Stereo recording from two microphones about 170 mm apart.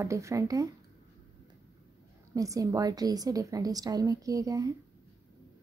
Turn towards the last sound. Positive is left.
turn(degrees=-20)  # may be behind; listen again after turning